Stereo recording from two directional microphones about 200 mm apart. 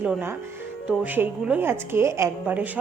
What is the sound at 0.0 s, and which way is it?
A woman's voice, 10° right (ahead or behind).